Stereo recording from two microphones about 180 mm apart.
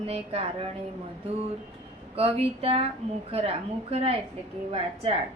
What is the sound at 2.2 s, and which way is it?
A woman's voice, 35° right (ahead or behind).